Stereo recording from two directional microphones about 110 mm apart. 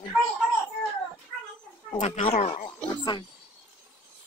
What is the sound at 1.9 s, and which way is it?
Speech, 90° left.